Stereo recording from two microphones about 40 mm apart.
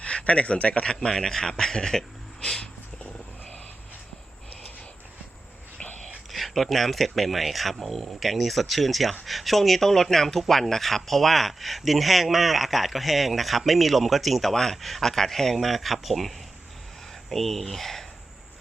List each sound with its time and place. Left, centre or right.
0.0 s speech: left
1.1 s speech: centre
6.3 s speech: centre